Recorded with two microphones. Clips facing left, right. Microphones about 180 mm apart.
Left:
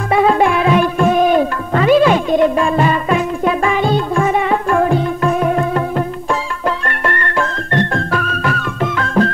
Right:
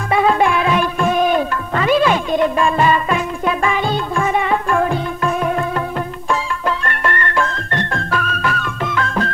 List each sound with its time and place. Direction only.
0.1 s music: 40° left (ahead or behind)